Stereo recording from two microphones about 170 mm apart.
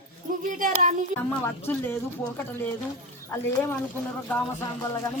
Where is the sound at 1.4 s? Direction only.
15° left (ahead or behind).